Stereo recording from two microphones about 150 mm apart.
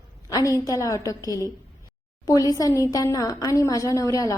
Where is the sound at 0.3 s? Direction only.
25° left (ahead or behind).